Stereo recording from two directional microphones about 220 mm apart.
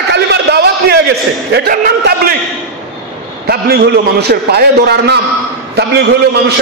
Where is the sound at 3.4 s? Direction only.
45° right (ahead or behind).